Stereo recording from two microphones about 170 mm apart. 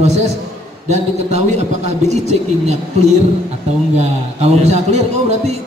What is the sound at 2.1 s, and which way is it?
Speech, 40° right (ahead or behind).